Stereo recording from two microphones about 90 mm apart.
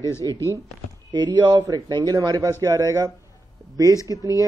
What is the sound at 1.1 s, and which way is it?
A man's voice, 55° right (ahead or behind).